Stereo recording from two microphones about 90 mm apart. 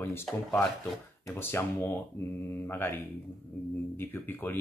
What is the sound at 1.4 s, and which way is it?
Speech, 25° left (ahead or behind).